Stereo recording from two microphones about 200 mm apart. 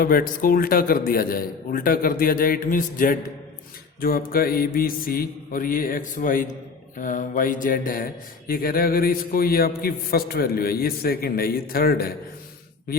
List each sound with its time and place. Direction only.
0.0 s speech: 45° left (ahead or behind)